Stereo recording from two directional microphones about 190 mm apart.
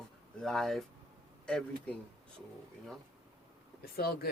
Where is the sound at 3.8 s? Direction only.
55° left (ahead or behind).